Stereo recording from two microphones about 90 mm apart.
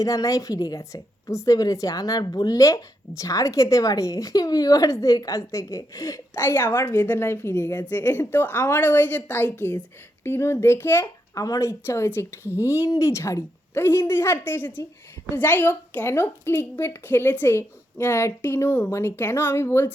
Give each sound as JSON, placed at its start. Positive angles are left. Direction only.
{"t": 0.0, "sound": "a woman's voice", "side_deg": 40}
{"t": 11.0, "sound": "speech", "side_deg": 40}
{"t": 11.7, "sound": "a woman's voice", "side_deg": 30}